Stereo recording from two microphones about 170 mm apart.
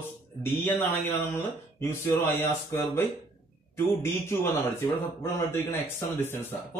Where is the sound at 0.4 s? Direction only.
10° left (ahead or behind).